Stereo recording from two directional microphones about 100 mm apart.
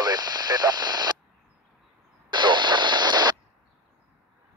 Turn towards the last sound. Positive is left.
turn(degrees=-45)  # may be behind; listen again after turning